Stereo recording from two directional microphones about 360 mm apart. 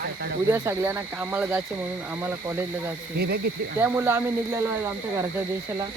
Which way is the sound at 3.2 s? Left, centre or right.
Right.